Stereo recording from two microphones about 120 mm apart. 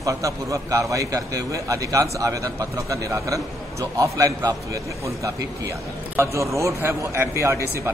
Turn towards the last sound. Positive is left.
turn(degrees=-20)  # may be behind; listen again after turning